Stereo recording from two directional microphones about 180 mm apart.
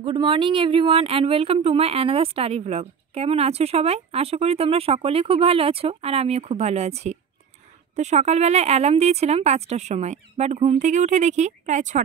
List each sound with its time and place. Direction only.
0.0 s speech: 30° right (ahead or behind); by 12.0 s 45° right (ahead or behind)